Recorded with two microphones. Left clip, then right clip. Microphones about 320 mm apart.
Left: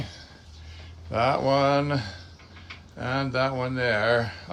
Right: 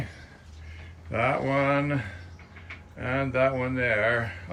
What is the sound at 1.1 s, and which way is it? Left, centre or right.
Speech, centre.